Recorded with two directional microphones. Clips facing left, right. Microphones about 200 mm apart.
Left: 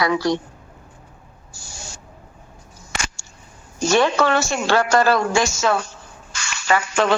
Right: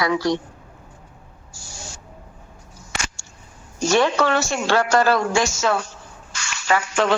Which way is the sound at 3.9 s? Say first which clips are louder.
Left 1 dB; 60° left (ahead or behind).